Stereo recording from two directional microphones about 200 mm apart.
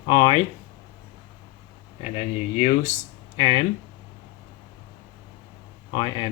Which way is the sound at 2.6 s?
35° left (ahead or behind).